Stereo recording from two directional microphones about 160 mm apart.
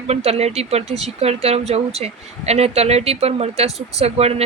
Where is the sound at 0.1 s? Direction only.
40° right (ahead or behind).